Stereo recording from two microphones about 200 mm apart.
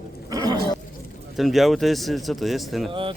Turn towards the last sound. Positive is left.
turn(degrees=-25)  # may be behind; listen again after turning